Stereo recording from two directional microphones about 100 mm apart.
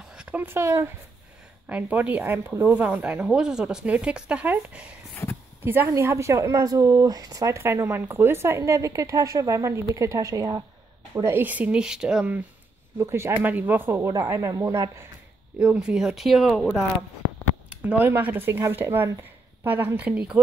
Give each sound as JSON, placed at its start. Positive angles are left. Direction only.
{"t": 0.1, "sound": "speech", "side_deg": -10}
{"t": 1.7, "sound": "a woman's voice", "side_deg": -15}
{"t": 5.1, "sound": "a sound", "side_deg": 20}
{"t": 5.6, "sound": "speech", "side_deg": -20}
{"t": 7.5, "sound": "speech", "side_deg": -25}
{"t": 11.2, "sound": "a woman's voice", "side_deg": -20}
{"t": 13.0, "sound": "speech", "side_deg": -25}
{"t": 15.6, "sound": "speech", "side_deg": -10}
{"t": 17.6, "sound": "a woman's voice", "side_deg": -15}